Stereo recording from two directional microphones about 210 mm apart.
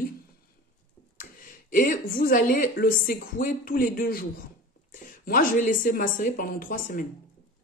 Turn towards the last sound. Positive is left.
turn(degrees=40)  # may be behind; listen again after turning